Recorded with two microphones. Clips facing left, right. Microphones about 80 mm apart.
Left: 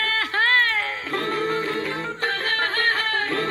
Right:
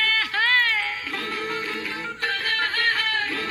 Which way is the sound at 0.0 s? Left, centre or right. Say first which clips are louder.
Left 1 dB; left.